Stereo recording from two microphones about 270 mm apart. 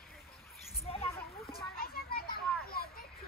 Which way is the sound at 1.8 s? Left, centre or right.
Left.